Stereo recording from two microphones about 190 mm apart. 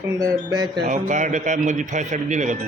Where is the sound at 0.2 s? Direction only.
20° right (ahead or behind).